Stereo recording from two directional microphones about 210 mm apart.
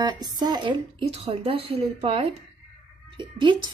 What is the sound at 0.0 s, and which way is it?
A woman's voice, 20° right (ahead or behind).